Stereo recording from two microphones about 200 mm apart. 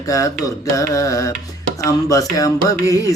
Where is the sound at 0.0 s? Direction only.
15° left (ahead or behind).